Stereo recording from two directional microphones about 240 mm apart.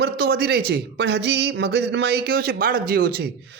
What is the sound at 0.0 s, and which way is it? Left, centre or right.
Speech, right.